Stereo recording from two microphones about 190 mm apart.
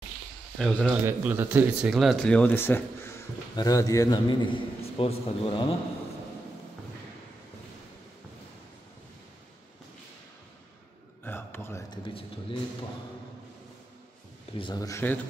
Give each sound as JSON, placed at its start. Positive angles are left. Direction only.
{"t": 0.6, "sound": "speech", "side_deg": 5}
{"t": 1.0, "sound": "speech", "side_deg": -10}
{"t": 11.2, "sound": "a sound", "side_deg": 10}
{"t": 12.0, "sound": "speech", "side_deg": 30}
{"t": 14.6, "sound": "speech", "side_deg": 20}